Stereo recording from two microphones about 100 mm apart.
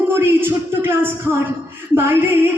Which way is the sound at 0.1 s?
20° right (ahead or behind).